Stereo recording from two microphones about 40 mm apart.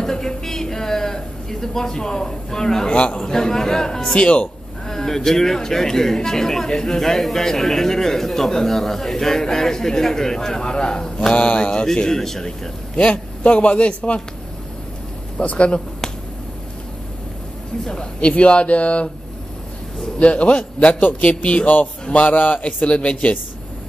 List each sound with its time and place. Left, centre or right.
0.0 s a sound: centre
3.0 s speech: left
4.1 s a man's voice: left
4.8 s speech: centre
12.9 s a man's voice: left
15.4 s a man's voice: left
18.2 s a man's voice: left
20.2 s a man's voice: left
22.1 s a man's voice: left